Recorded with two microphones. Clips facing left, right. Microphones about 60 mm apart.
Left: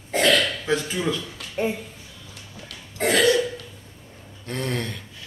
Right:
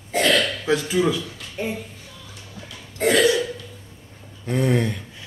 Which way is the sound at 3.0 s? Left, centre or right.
Right.